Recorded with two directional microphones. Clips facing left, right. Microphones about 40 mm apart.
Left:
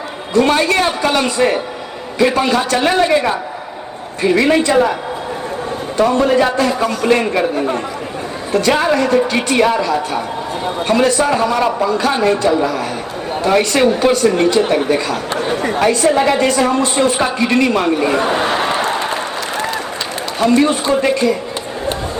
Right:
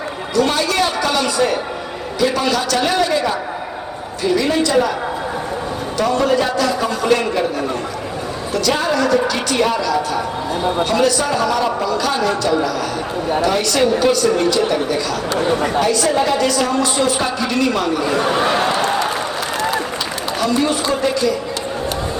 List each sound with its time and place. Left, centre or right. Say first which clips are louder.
0.3 s a woman's voice: left 4 dB; left
4.2 s a woman's voice: left 4 dB; left
6.0 s a woman's voice: left 4 dB; left
8.5 s a woman's voice: left 4 dB; left
20.4 s a woman's voice: left 5 dB; left